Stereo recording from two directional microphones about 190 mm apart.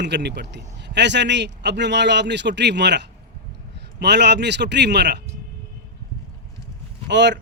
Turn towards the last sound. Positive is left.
turn(degrees=-65)  # may be behind; listen again after turning